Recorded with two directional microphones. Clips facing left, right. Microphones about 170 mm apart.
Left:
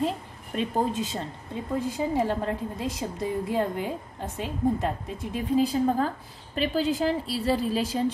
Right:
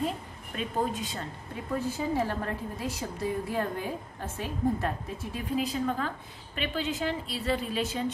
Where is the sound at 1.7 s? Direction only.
15° left (ahead or behind).